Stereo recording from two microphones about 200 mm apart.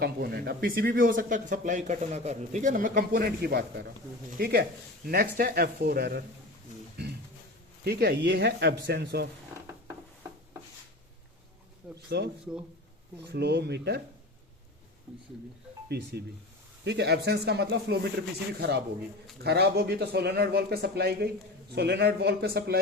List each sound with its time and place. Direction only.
0.0 s speech: 50° right (ahead or behind)
7.9 s speech: 55° right (ahead or behind)
12.0 s speech: 55° right (ahead or behind)
15.9 s speech: 55° right (ahead or behind)
19.4 s speech: 55° right (ahead or behind)